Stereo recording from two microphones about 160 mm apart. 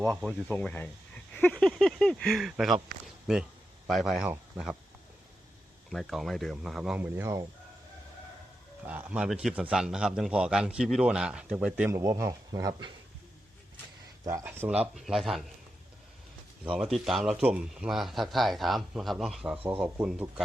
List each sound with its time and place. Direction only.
0.0 s a man's voice: centre (ahead or behind)
1.3 s a sound: 10° left (ahead or behind)
1.6 s a man's voice: 5° left (ahead or behind)
5.9 s a man's voice: centre (ahead or behind); by 7.4 s 20° right (ahead or behind)
8.9 s a man's voice: 10° right (ahead or behind)
11.9 s speech: 20° right (ahead or behind)
14.3 s speech: 15° right (ahead or behind)
14.9 s a man's voice: centre (ahead or behind)
16.7 s a man's voice: 5° right (ahead or behind)